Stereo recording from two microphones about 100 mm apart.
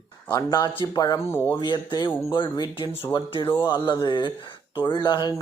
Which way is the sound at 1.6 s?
50° left (ahead or behind).